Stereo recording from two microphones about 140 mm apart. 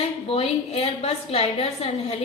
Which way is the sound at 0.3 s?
45° left (ahead or behind).